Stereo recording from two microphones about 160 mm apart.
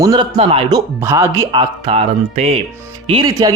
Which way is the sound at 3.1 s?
25° right (ahead or behind).